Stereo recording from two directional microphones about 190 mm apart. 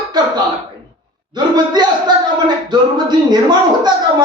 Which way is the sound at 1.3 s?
20° right (ahead or behind).